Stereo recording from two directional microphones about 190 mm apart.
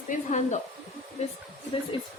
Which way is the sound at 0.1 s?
40° left (ahead or behind).